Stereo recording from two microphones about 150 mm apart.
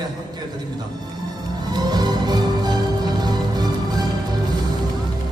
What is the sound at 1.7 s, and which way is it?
Music, 25° right (ahead or behind).